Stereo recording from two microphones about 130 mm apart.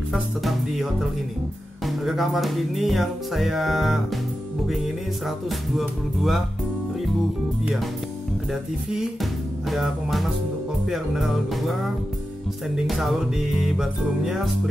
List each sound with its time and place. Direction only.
0.1 s music: centre (ahead or behind)
8.9 s music: centre (ahead or behind)